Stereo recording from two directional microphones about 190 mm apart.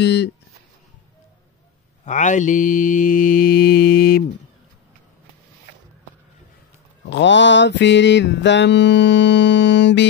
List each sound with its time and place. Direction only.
0.0 s speech: 60° left (ahead or behind)
2.0 s mantra: 40° left (ahead or behind)
7.1 s mantra: 70° left (ahead or behind)